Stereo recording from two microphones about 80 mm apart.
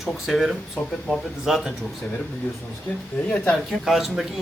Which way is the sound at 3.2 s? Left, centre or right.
Centre.